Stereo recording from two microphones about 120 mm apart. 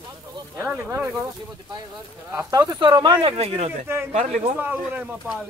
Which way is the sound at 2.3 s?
25° right (ahead or behind).